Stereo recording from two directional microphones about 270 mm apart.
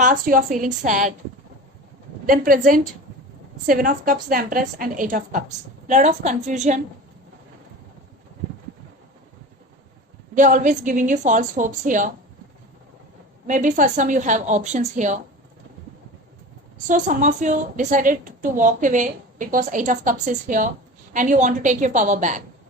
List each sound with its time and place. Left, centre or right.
0.0 s a woman's voice: right
2.2 s a woman's voice: right
10.3 s a woman's voice: right
13.5 s a woman's voice: right
16.8 s a woman's voice: right